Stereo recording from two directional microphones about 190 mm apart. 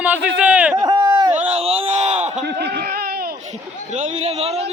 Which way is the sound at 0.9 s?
20° right (ahead or behind).